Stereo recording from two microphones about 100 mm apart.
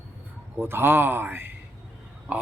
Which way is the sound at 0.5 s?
25° right (ahead or behind).